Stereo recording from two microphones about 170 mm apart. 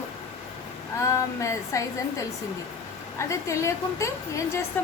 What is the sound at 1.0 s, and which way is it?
A woman's voice, 15° left (ahead or behind).